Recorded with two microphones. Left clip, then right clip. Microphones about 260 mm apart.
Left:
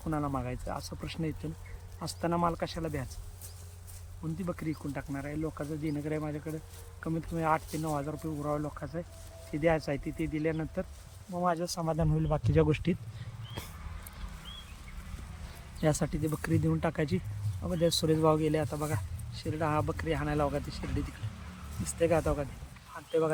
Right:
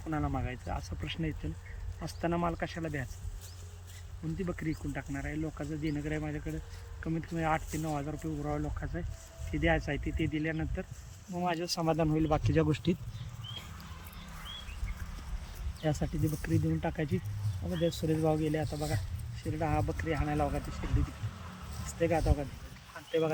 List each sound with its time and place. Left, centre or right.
0.1 s speech: centre
4.4 s speech: centre
11.3 s speech: left
12.6 s speech: centre
15.8 s speech: centre
22.0 s speech: centre